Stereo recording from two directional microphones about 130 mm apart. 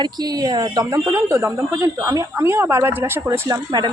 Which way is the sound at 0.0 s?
30° right (ahead or behind).